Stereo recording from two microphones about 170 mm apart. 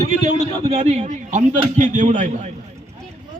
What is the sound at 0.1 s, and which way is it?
A man's voice, 45° right (ahead or behind).